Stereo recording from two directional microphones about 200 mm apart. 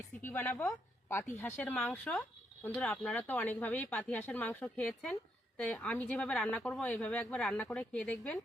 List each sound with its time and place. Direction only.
0.2 s speech: 10° left (ahead or behind)